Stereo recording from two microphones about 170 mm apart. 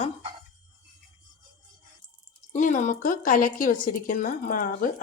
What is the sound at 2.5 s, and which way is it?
A woman's voice, 45° left (ahead or behind).